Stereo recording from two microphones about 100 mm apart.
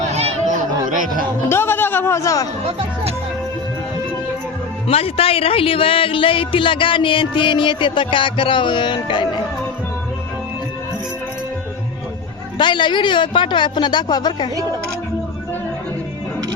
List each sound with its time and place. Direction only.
0.1 s chatter: 90° right
1.5 s music: 25° left (ahead or behind)
2.6 s music: 85° right
4.9 s speech: 75° left (ahead or behind); by 9.4 s 50° left (ahead or behind)
12.5 s speech: 50° left (ahead or behind)